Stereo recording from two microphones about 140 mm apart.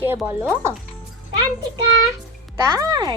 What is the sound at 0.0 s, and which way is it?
Speech, 15° right (ahead or behind).